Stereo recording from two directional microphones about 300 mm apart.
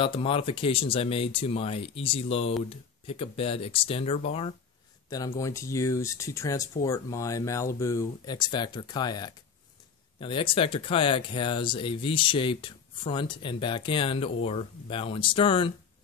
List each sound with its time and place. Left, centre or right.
0.0 s speech: centre